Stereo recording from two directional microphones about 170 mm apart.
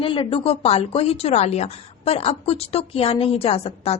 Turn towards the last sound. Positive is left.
turn(degrees=35)  # may be behind; listen again after turning